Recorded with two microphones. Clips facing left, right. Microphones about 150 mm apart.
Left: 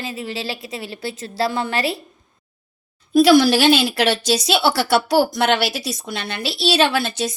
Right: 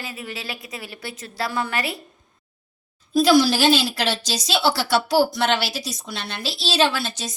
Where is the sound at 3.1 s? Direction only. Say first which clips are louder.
Left 4 dB; 60° left (ahead or behind).